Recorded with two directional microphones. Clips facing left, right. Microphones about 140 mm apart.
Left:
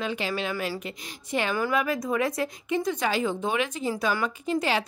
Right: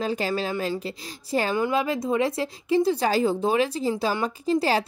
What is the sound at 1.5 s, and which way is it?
A woman's voice, 25° right (ahead or behind).